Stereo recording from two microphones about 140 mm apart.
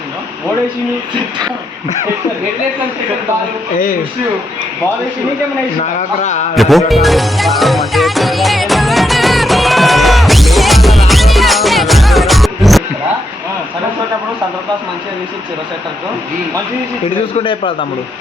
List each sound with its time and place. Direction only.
5.8 s a man's voice: 60° left (ahead or behind)
6.6 s music: centre (ahead or behind)
17.3 s a man's voice: 40° left (ahead or behind)